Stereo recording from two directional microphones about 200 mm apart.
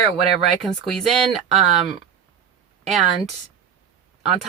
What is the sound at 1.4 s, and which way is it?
Speech, 30° right (ahead or behind).